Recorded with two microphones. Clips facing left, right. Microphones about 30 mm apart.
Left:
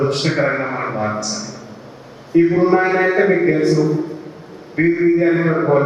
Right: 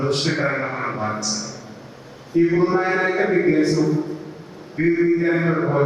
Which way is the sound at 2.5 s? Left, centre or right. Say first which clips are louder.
Left 3 dB; centre.